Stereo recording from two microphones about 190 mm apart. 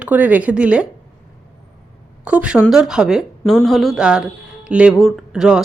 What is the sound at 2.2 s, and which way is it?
A woman's voice, 5° right (ahead or behind).